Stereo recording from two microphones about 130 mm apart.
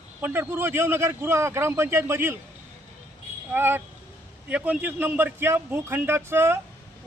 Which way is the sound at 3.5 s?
15° right (ahead or behind).